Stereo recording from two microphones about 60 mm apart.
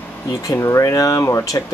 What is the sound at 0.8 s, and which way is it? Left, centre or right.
Speech, left.